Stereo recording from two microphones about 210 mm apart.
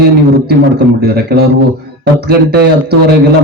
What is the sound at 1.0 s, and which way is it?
Speech, 50° right (ahead or behind).